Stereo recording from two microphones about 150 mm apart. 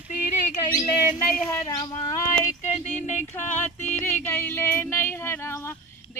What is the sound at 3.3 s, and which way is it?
Speech, 15° left (ahead or behind).